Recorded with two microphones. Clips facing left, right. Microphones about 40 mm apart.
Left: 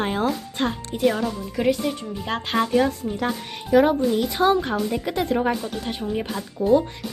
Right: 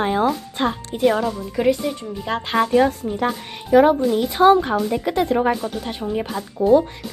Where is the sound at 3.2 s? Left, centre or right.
Centre.